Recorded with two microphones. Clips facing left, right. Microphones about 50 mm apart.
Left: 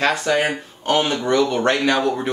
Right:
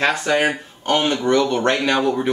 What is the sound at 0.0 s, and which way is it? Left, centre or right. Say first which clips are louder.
Speech: right 1 dB; centre.